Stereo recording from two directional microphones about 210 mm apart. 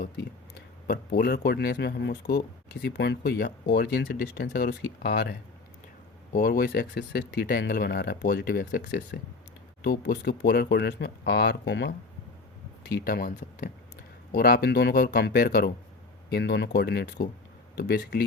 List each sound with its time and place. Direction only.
0.9 s speech: 45° left (ahead or behind)